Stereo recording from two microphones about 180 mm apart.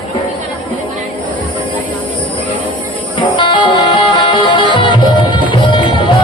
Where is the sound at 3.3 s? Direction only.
25° left (ahead or behind).